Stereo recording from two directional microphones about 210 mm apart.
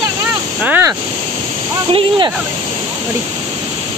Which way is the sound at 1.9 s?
25° right (ahead or behind).